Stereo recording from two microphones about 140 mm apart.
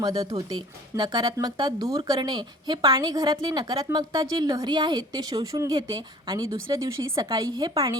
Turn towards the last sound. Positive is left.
turn(degrees=-30)  # may be behind; listen again after turning